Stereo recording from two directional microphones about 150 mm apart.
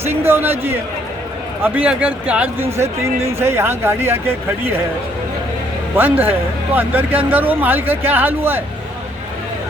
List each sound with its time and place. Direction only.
0.0 s speech: 15° right (ahead or behind)
6.0 s speech: 15° right (ahead or behind)